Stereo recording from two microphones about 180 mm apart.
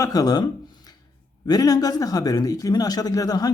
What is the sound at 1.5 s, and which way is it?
Speech, 20° left (ahead or behind).